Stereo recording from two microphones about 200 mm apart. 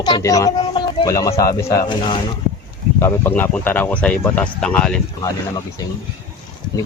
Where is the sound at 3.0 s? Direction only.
10° left (ahead or behind).